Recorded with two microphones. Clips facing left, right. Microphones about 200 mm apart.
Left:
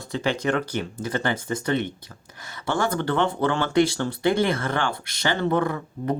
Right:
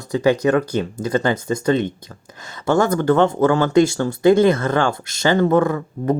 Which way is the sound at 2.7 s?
45° right (ahead or behind).